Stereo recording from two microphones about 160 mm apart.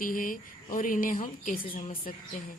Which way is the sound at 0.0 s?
60° left (ahead or behind).